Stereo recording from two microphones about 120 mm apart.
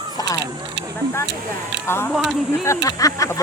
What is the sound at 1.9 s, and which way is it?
Speech, 20° left (ahead or behind).